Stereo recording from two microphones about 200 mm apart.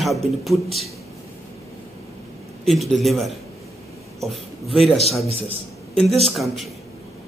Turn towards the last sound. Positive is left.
turn(degrees=0)  # may be behind; listen again after turning